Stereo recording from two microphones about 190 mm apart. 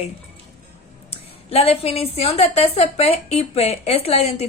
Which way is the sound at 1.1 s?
30° left (ahead or behind).